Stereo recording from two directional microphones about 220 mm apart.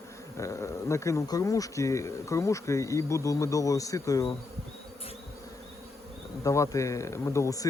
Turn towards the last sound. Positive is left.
turn(degrees=15)  # may be behind; listen again after turning